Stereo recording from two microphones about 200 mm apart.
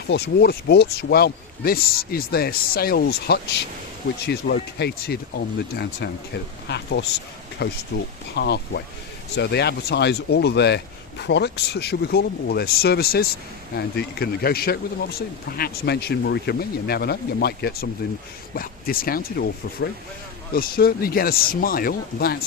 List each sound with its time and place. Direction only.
0.1 s speech: 55° left (ahead or behind)